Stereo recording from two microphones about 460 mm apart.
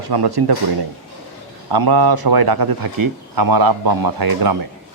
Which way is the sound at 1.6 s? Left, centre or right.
Right.